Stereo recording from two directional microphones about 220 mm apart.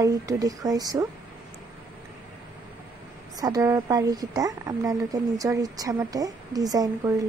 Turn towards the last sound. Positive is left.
turn(degrees=-15)  # may be behind; listen again after turning